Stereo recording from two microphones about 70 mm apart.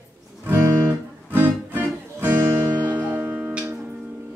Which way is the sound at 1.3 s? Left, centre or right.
Right.